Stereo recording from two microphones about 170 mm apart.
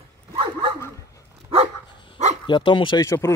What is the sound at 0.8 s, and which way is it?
Dog, 20° left (ahead or behind).